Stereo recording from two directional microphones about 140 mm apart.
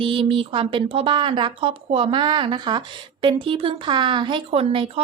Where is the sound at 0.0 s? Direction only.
40° right (ahead or behind).